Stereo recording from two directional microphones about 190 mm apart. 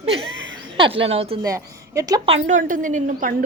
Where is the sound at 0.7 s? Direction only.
30° right (ahead or behind).